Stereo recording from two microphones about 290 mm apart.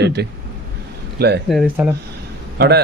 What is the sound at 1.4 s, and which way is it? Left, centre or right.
Speech, centre.